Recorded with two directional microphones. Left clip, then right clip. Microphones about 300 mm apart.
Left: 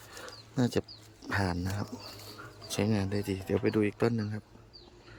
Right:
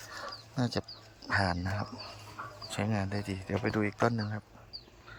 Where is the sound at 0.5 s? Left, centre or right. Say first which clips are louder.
Left 4 dB; centre.